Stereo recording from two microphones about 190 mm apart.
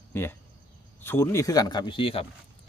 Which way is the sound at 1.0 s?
10° left (ahead or behind).